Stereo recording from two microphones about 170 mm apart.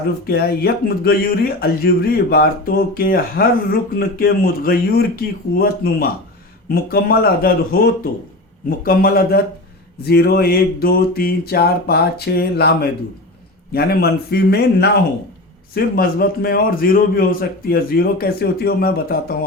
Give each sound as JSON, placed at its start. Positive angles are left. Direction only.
{"t": 0.3, "sound": "speech", "side_deg": 65}
{"t": 8.8, "sound": "speech", "side_deg": 60}
{"t": 10.0, "sound": "a sound", "side_deg": 70}
{"t": 15.7, "sound": "speech", "side_deg": 60}